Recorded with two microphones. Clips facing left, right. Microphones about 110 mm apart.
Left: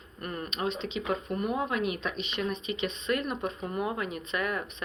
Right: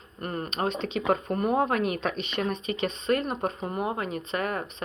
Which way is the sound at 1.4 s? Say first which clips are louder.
Right 5 dB; 40° right (ahead or behind).